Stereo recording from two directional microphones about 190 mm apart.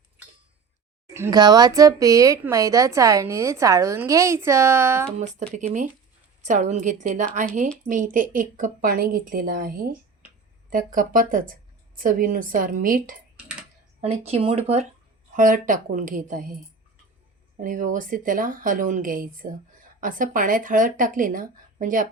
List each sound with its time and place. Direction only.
1.1 s speech: 15° right (ahead or behind)
5.2 s speech: 35° right (ahead or behind)
14.0 s speech: 35° right (ahead or behind)
17.6 s speech: 45° right (ahead or behind)